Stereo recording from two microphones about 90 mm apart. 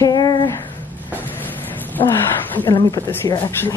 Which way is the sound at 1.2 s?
20° left (ahead or behind).